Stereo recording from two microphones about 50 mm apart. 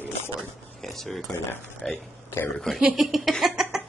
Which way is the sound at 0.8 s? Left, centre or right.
Centre.